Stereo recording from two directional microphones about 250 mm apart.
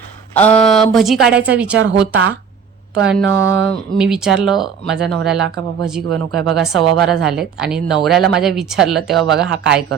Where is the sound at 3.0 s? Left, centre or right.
Centre.